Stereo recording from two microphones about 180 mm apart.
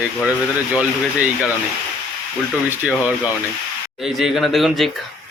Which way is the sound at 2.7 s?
5° right (ahead or behind).